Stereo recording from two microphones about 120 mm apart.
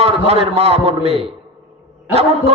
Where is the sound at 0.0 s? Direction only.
60° right (ahead or behind).